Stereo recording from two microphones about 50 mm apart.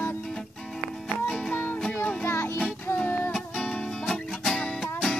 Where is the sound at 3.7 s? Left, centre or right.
Centre.